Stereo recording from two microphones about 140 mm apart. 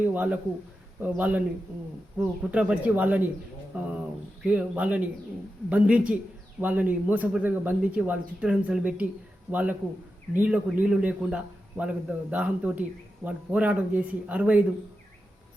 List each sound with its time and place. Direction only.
0.0 s a man's voice: 10° right (ahead or behind)
4.4 s a man's voice: 10° right (ahead or behind)